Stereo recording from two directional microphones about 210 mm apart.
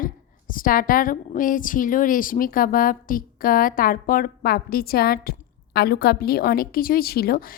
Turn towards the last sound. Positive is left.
turn(degrees=45)  # may be behind; listen again after turning